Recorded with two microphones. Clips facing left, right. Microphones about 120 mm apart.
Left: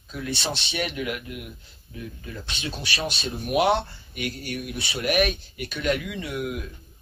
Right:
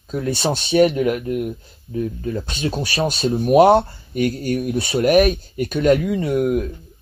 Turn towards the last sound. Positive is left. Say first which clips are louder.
# right 12 dB
turn(degrees=-45)  # may be behind; listen again after turning